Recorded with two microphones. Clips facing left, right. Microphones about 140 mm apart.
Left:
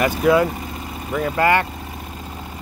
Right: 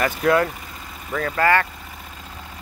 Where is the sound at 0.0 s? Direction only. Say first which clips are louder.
Left 3 dB; 10° left (ahead or behind).